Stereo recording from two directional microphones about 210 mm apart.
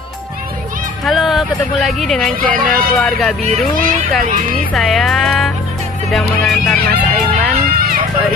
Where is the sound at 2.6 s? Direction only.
40° right (ahead or behind).